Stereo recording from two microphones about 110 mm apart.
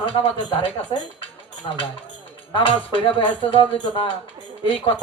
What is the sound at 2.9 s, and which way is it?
Speech, 50° left (ahead or behind).